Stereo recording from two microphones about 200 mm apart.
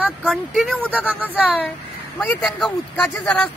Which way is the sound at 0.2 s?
Centre (ahead or behind).